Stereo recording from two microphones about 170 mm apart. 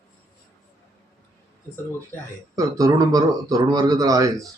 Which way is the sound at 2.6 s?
20° right (ahead or behind).